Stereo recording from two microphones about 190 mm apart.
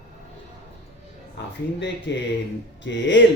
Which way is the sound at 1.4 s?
65° left (ahead or behind).